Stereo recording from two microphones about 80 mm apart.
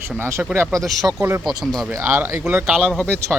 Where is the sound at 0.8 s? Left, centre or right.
Centre.